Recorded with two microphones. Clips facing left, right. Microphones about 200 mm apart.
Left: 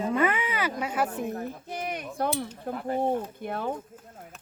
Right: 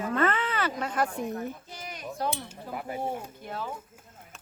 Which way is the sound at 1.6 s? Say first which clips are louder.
Left 8 dB; 60° left (ahead or behind).